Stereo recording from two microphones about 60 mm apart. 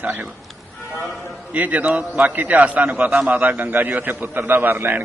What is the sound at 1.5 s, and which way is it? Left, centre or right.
A man's voice, right.